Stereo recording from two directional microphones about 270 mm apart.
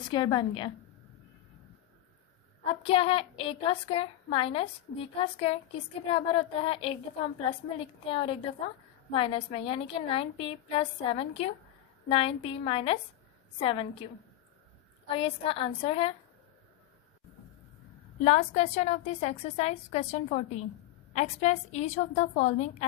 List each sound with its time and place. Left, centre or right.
0.0 s a woman's voice: centre
2.6 s a woman's voice: left
15.1 s a woman's voice: left
18.2 s a woman's voice: left